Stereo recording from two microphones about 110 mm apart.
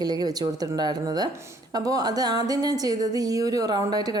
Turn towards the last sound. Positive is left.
turn(degrees=-35)  # may be behind; listen again after turning